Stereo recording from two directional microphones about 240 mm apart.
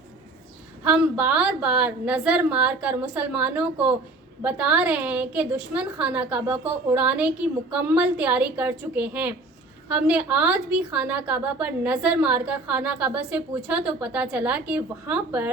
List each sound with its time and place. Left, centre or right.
0.9 s a woman's voice: centre